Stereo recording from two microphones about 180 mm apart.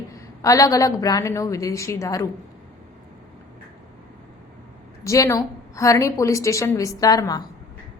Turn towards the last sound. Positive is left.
turn(degrees=20)  # may be behind; listen again after turning